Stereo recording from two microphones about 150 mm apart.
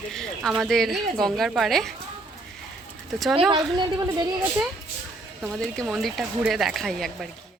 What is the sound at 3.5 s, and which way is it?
Speech, 25° right (ahead or behind).